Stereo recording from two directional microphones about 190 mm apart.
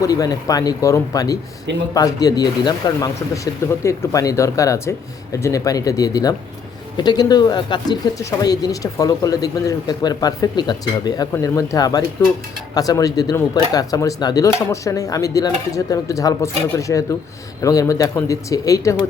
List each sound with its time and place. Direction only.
0.0 s speech: 20° left (ahead or behind)